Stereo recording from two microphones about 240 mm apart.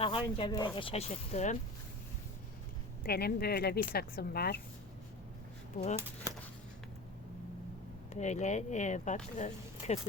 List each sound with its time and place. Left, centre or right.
0.0 s speech: left
3.1 s a woman's voice: left
5.7 s speech: left
8.1 s speech: left